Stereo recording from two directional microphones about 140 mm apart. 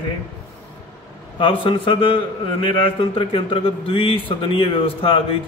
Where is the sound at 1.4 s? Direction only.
40° left (ahead or behind).